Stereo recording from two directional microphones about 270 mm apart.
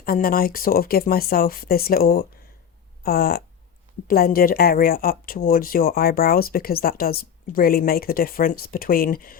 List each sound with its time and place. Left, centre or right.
0.0 s speech: left